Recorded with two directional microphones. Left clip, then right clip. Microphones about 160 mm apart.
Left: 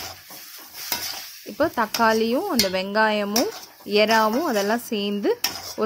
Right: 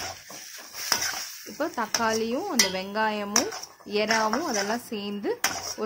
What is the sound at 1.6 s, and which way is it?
Stir, 40° left (ahead or behind).